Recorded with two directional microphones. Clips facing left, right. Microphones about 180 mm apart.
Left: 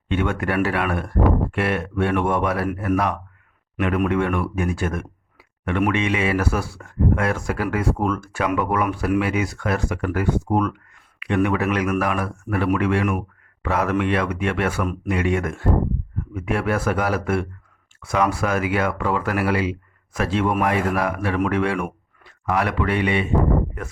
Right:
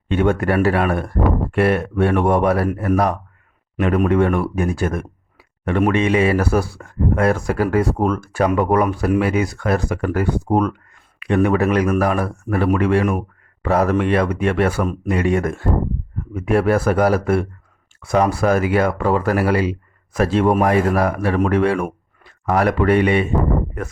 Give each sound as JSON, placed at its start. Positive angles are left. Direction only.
{"t": 0.1, "sound": "speech", "side_deg": -40}